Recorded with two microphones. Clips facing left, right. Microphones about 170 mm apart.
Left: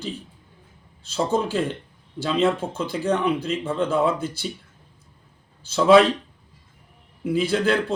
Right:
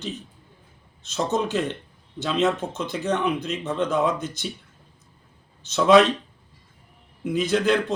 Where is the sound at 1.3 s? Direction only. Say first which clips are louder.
Left 1 dB; 10° left (ahead or behind).